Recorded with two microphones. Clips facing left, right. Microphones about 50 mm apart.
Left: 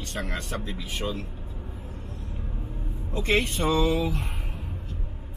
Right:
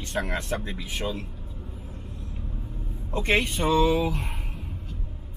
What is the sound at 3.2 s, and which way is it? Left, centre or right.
Speech, centre.